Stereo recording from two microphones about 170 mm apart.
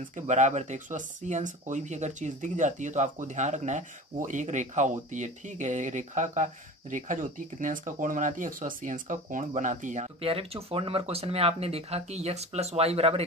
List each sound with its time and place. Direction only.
0.0 s speech: 45° right (ahead or behind)
10.2 s speech: 35° right (ahead or behind)